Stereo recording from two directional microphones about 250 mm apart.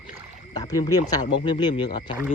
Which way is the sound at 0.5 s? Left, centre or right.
Centre.